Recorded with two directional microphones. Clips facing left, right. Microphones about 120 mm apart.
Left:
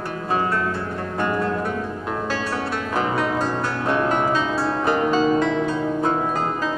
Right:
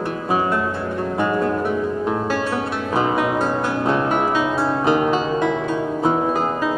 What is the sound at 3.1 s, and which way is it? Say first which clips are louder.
Music: right 3 dB; 20° right (ahead or behind).